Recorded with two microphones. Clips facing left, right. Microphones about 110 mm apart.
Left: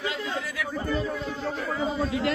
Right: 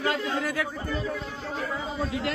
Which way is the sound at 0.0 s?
50° right (ahead or behind).